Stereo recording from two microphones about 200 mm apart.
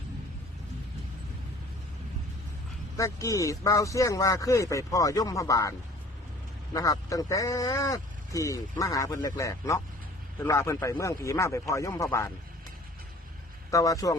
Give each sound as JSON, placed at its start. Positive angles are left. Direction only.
{"t": 3.0, "sound": "speech", "side_deg": 15}
{"t": 6.7, "sound": "speech", "side_deg": 15}
{"t": 13.7, "sound": "speech", "side_deg": 15}